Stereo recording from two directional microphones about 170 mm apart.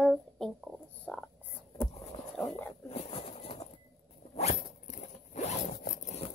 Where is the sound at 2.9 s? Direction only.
35° left (ahead or behind).